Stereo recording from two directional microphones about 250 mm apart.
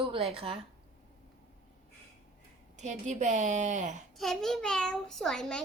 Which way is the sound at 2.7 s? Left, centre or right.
Right.